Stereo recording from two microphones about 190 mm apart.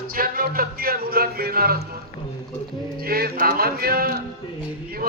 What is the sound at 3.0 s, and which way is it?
Speech, 55° right (ahead or behind).